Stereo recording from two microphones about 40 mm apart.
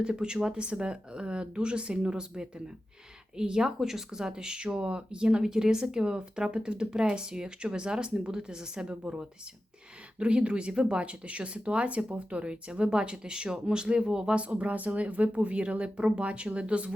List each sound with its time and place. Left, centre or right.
0.0 s speech: right
8.9 s speech: right
14.3 s speech: right